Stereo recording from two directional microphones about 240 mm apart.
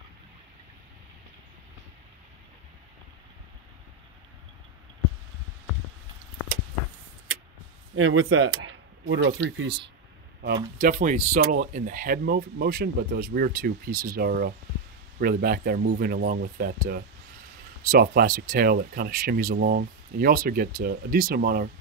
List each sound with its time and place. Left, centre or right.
7.9 s speech: right